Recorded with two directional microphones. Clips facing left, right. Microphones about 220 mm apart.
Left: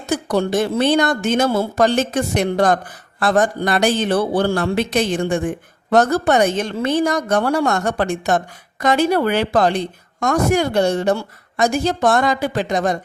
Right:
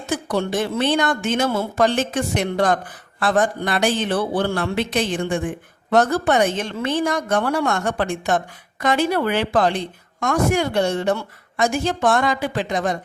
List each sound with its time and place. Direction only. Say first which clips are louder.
0.1 s speech: left 4 dB; 40° left (ahead or behind)